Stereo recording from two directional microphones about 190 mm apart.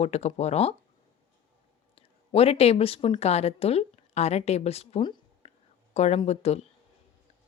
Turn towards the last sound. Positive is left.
turn(degrees=35)  # may be behind; listen again after turning